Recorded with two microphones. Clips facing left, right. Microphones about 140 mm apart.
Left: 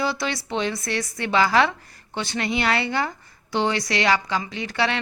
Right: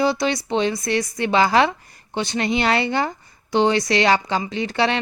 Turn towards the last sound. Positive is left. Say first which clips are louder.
# right 4 dB
turn(degrees=-25)  # may be behind; listen again after turning